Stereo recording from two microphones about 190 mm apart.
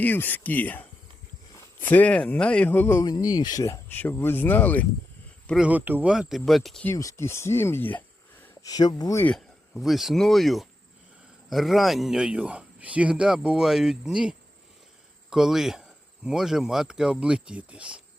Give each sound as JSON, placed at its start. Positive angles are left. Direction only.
{"t": 0.0, "sound": "speech", "side_deg": 10}
{"t": 5.5, "sound": "speech", "side_deg": -5}
{"t": 6.9, "sound": "speech", "side_deg": 15}
{"t": 8.6, "sound": "speech", "side_deg": 20}
{"t": 9.3, "sound": "speech", "side_deg": 0}